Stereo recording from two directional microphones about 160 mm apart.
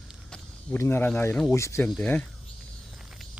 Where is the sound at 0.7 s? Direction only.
15° left (ahead or behind).